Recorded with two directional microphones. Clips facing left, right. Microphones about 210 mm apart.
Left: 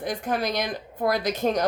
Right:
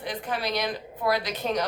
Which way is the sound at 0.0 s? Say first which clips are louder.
Left 4 dB; 45° left (ahead or behind).